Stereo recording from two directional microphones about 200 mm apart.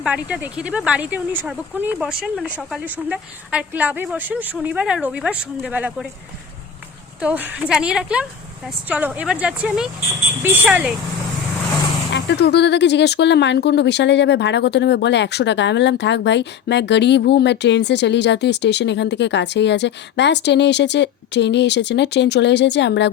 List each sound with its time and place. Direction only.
0.0 s a woman's voice: 5° right (ahead or behind)
7.2 s a woman's voice: 10° right (ahead or behind)
12.1 s speech: 55° left (ahead or behind)